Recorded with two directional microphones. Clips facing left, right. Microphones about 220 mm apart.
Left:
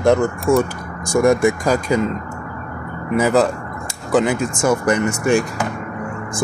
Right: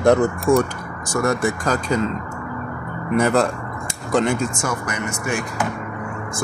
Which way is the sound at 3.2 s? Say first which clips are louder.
Left 3 dB; centre (ahead or behind).